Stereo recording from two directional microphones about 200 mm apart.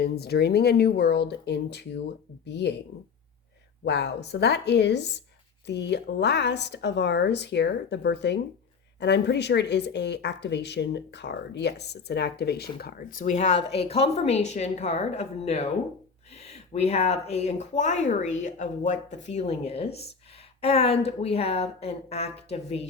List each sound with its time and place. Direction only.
0.0 s a woman's voice: 50° left (ahead or behind)
3.8 s a woman's voice: 55° left (ahead or behind); by 22.8 s 30° left (ahead or behind)